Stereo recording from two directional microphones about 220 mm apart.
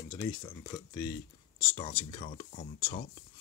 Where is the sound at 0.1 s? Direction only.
15° left (ahead or behind).